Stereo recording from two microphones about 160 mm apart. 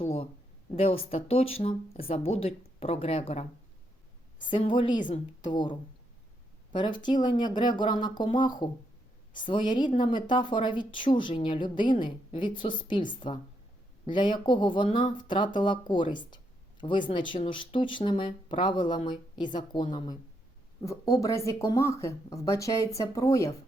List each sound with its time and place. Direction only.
0.8 s speech: 40° left (ahead or behind)
4.4 s speech: 30° left (ahead or behind)
6.7 s speech: 30° left (ahead or behind)
20.8 s speech: 20° left (ahead or behind)